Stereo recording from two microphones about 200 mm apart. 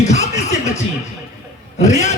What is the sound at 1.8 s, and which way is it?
Music, 35° left (ahead or behind).